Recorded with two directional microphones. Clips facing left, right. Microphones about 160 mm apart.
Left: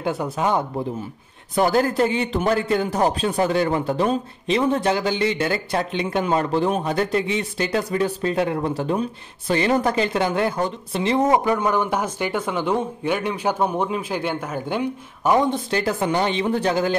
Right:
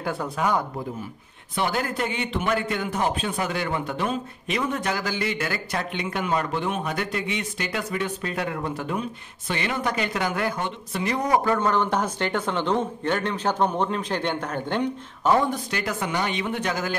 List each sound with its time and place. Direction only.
0.0 s speech: 20° left (ahead or behind)
1.5 s a man's voice: 40° left (ahead or behind)
11.4 s a man's voice: 15° left (ahead or behind)
15.7 s a man's voice: 30° left (ahead or behind)